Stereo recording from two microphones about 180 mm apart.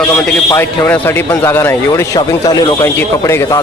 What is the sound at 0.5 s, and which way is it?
Speech, 10° left (ahead or behind).